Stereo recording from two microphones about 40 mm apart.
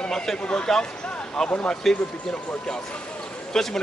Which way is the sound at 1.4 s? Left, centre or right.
Centre.